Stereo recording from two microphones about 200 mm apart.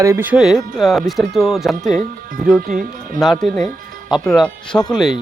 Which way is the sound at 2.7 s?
40° right (ahead or behind).